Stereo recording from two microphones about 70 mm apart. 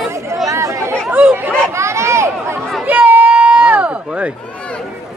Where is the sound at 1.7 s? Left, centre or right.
Right.